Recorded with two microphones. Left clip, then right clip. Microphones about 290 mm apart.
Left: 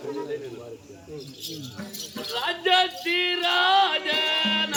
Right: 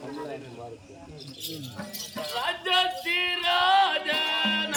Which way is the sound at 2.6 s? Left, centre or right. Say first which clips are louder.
Left 4 dB; centre.